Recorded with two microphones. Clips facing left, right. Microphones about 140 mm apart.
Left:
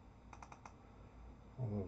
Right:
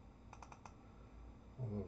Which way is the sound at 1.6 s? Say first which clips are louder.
Left 2 dB; 10° left (ahead or behind).